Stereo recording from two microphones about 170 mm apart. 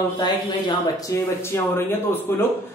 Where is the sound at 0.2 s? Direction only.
25° left (ahead or behind).